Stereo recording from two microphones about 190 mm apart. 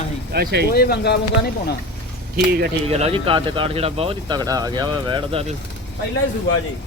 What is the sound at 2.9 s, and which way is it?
Speech, 30° right (ahead or behind).